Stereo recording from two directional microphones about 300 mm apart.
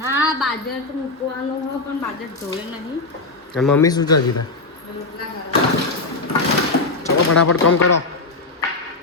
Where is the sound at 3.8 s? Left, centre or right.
Centre.